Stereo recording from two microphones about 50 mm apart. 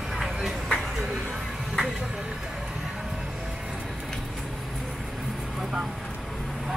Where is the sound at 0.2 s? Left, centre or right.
Centre.